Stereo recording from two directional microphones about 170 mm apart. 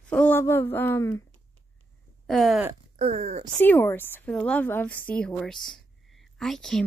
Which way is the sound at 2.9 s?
35° right (ahead or behind).